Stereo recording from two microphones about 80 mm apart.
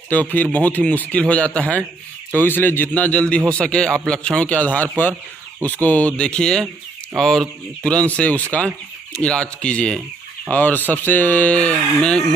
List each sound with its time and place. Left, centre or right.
0.1 s speech: left